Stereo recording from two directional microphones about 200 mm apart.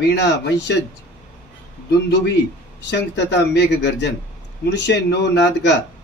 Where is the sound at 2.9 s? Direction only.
60° left (ahead or behind).